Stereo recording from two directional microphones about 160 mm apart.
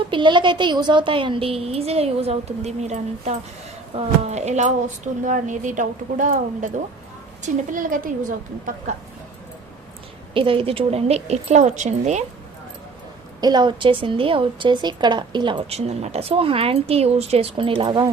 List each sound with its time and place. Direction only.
0.1 s a woman's voice: 30° right (ahead or behind); by 9.0 s 55° right (ahead or behind)
10.3 s speech: 35° right (ahead or behind)
13.4 s speech: 25° right (ahead or behind)